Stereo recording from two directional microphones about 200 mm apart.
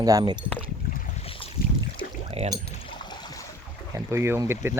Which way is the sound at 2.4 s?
30° right (ahead or behind).